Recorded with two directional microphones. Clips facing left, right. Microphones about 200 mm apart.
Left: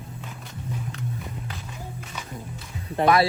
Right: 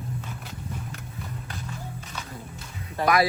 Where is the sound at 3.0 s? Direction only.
30° left (ahead or behind).